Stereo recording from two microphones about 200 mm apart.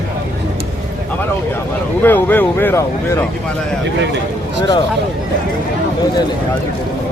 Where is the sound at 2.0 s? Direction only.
10° left (ahead or behind).